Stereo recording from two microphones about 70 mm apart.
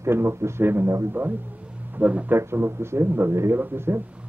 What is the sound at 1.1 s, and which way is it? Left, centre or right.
Speech, right.